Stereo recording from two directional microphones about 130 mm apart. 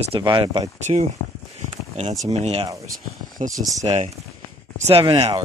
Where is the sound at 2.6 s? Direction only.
25° right (ahead or behind).